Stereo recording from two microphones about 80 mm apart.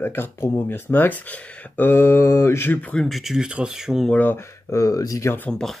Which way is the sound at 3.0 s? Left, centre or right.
Centre.